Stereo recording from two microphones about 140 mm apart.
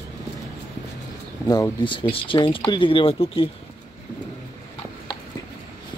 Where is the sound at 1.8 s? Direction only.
35° left (ahead or behind).